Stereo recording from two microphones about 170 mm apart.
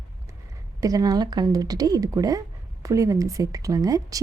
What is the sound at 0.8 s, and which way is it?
A woman's voice, 20° right (ahead or behind).